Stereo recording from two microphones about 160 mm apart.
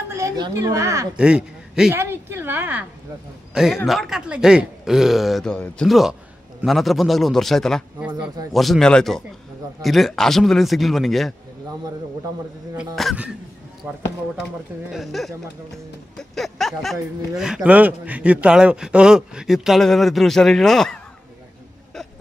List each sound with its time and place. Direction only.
0.1 s speech: 20° right (ahead or behind)
1.1 s a man's voice: 5° right (ahead or behind)
2.0 s a sound: 15° right (ahead or behind)
3.5 s a man's voice: 5° right (ahead or behind)
12.7 s a man's voice: centre (ahead or behind)
14.9 s a man's voice: centre (ahead or behind)